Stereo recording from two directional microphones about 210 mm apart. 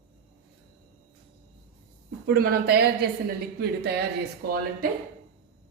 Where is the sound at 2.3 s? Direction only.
45° right (ahead or behind).